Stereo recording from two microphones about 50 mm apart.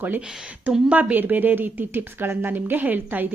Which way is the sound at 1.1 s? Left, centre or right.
Right.